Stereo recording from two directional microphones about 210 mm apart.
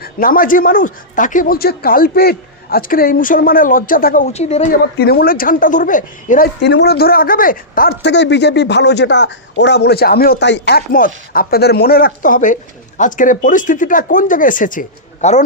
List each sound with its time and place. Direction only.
0.0 s speech: 40° left (ahead or behind)
4.9 s speech: 45° left (ahead or behind)
6.6 s speech: 50° left (ahead or behind); by 15.4 s 35° left (ahead or behind)